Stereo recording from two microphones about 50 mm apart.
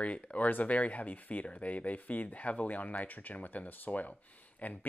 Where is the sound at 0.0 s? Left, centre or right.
Left.